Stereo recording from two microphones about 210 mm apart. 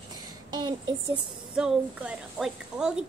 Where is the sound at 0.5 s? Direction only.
20° right (ahead or behind).